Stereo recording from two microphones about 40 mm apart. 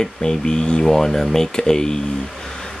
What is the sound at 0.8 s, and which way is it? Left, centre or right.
Speech, centre.